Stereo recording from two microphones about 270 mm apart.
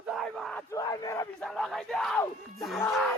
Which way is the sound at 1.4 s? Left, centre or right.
Centre.